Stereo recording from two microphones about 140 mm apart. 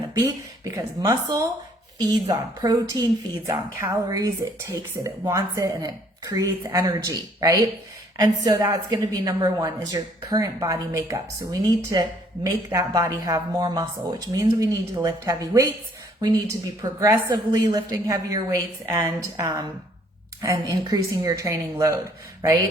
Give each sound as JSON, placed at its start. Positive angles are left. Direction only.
{"t": 0.8, "sound": "a woman's voice", "side_deg": -25}